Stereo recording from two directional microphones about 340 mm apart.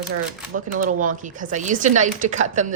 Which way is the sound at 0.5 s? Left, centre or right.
Right.